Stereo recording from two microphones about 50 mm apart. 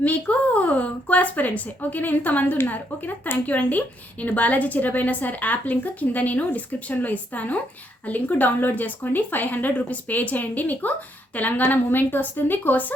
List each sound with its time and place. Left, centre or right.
0.0 s speech: left